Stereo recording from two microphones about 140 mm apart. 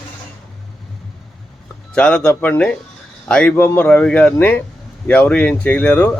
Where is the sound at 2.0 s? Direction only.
10° left (ahead or behind).